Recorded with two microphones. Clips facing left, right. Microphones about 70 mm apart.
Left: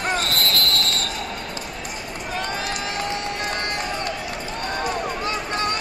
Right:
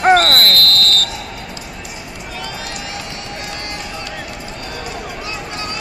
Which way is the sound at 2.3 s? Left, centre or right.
Left.